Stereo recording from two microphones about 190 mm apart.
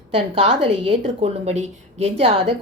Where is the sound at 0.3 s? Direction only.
30° right (ahead or behind).